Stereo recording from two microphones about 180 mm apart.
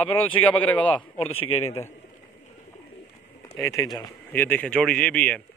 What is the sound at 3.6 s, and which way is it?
Speech, 20° left (ahead or behind).